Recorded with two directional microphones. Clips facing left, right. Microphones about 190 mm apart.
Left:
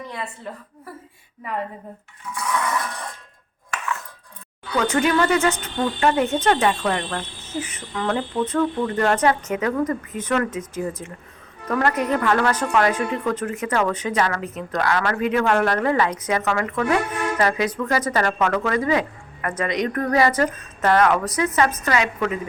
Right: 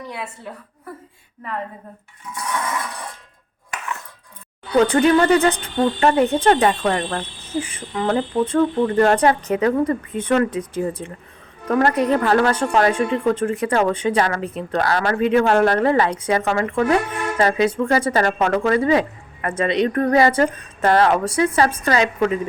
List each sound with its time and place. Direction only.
0.1 s a woman's voice: 10° right (ahead or behind)
4.8 s a woman's voice: 35° right (ahead or behind)